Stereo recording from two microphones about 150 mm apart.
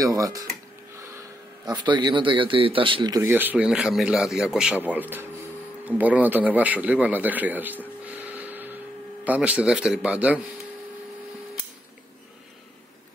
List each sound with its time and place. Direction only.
0.0 s speech: 20° right (ahead or behind)
1.7 s speech: 30° right (ahead or behind)
3.3 s a man's voice: 10° right (ahead or behind)